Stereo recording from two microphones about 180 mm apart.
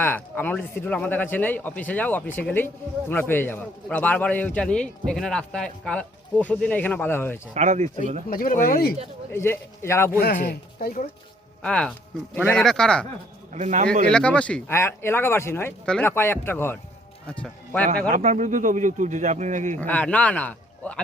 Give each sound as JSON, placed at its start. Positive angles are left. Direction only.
{"t": 0.0, "sound": "a man's voice", "side_deg": 10}
{"t": 7.5, "sound": "speech", "side_deg": -40}
{"t": 8.3, "sound": "speech", "side_deg": 50}
{"t": 9.3, "sound": "a man's voice", "side_deg": 15}
{"t": 10.2, "sound": "speech", "side_deg": 60}
{"t": 11.6, "sound": "speech", "side_deg": 5}
{"t": 13.5, "sound": "a man's voice", "side_deg": -40}
{"t": 14.1, "sound": "a man's voice", "side_deg": 5}
{"t": 18.1, "sound": "a man's voice", "side_deg": -40}
{"t": 19.8, "sound": "a man's voice", "side_deg": 10}